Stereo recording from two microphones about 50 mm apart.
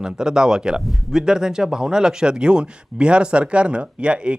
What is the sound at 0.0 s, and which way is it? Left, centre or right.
Speech, centre.